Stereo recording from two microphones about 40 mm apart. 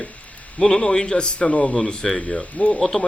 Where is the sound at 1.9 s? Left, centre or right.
Centre.